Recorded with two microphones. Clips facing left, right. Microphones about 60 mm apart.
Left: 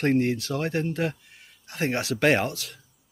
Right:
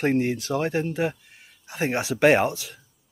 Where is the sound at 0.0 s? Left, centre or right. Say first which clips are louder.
Even; centre.